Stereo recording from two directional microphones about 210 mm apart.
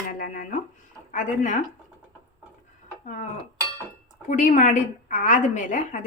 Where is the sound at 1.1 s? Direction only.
35° left (ahead or behind).